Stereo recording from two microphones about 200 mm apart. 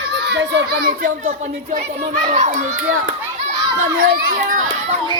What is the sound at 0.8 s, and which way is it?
Speech, 40° right (ahead or behind).